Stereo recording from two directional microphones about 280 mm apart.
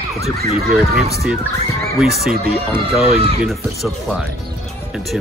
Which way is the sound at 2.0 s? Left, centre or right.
Centre.